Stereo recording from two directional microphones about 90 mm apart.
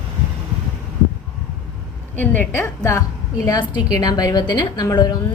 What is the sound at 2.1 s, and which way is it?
Speech, 20° left (ahead or behind).